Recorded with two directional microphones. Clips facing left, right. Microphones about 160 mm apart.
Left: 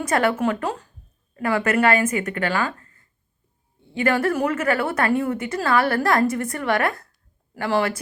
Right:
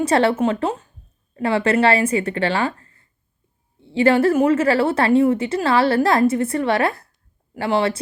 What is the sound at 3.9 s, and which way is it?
Speech, 30° right (ahead or behind).